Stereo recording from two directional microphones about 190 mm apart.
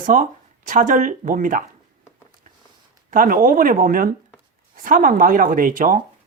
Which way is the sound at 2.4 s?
45° right (ahead or behind).